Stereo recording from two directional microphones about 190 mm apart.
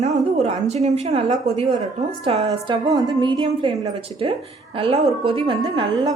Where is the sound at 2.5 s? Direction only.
20° right (ahead or behind).